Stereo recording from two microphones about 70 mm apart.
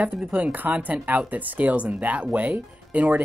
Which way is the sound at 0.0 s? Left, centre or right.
Right.